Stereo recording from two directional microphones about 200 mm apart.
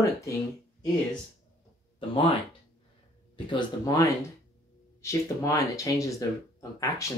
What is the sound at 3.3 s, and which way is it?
A man's voice, 25° left (ahead or behind).